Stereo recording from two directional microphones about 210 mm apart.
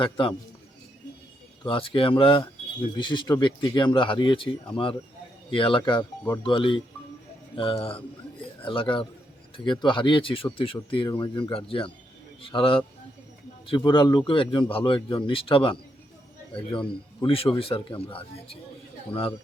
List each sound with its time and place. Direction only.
0.0 s speech: 25° left (ahead or behind)
1.6 s speech: 25° left (ahead or behind)